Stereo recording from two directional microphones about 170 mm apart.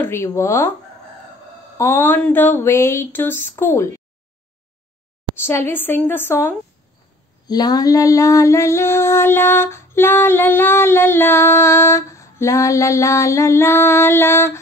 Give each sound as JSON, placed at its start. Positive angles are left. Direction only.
{"t": 0.0, "sound": "female singing", "side_deg": 15}
{"t": 1.8, "sound": "female singing", "side_deg": 15}
{"t": 5.4, "sound": "female singing", "side_deg": 15}
{"t": 7.4, "sound": "female singing", "side_deg": 25}